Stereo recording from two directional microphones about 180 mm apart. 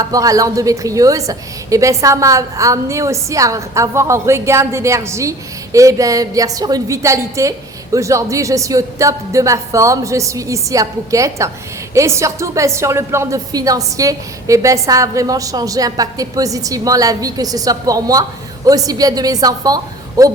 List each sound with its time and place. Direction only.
0.0 s a woman's voice: 20° right (ahead or behind)